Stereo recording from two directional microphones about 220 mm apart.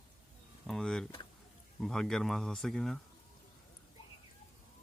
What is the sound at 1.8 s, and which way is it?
Speech, centre (ahead or behind).